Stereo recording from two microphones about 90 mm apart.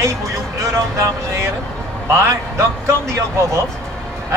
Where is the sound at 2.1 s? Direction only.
35° right (ahead or behind).